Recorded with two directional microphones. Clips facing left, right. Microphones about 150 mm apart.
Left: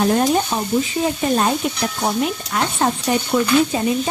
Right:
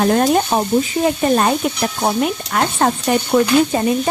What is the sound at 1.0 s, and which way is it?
Stir, 65° right (ahead or behind).